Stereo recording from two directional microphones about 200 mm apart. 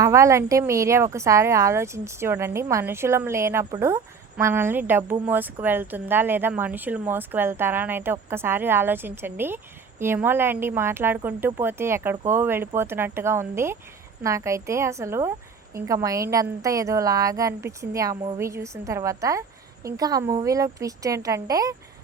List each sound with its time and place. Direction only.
0.0 s a woman's voice: 15° right (ahead or behind)